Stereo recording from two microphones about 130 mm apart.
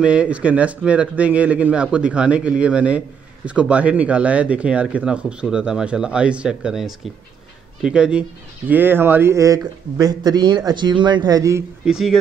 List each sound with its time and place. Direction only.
0.0 s speech: 10° right (ahead or behind); by 11.6 s 25° right (ahead or behind)
11.8 s speech: 5° right (ahead or behind)